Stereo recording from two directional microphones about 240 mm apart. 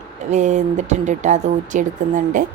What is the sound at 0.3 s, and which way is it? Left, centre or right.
Speech, right.